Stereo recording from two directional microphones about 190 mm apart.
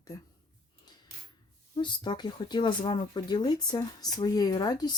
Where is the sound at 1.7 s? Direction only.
25° left (ahead or behind).